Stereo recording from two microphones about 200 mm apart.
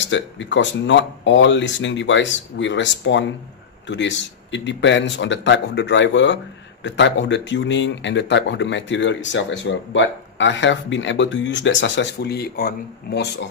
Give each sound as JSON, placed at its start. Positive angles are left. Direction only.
{"t": 0.0, "sound": "a man's voice", "side_deg": 65}